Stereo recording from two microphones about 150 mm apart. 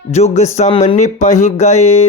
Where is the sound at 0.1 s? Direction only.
45° left (ahead or behind).